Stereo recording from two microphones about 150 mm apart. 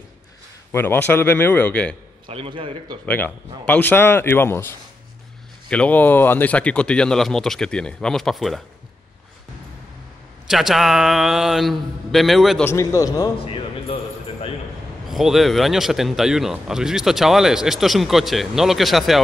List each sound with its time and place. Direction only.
0.7 s speech: 15° left (ahead or behind)
2.2 s a man's voice: 35° right (ahead or behind)
3.1 s speech: 10° left (ahead or behind)
10.4 s speech: centre (ahead or behind)
12.6 s a man's voice: 20° left (ahead or behind)
13.4 s music: 35° left (ahead or behind)
15.0 s speech: centre (ahead or behind)